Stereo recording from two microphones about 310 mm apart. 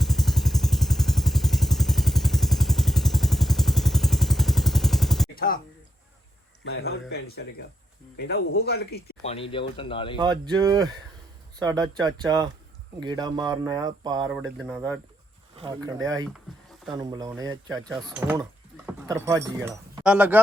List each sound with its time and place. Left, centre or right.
0.0 s vehicle: centre
6.7 s speech: left
9.2 s speech: centre
10.2 s speech: centre
14.4 s speech: centre
15.5 s speech: centre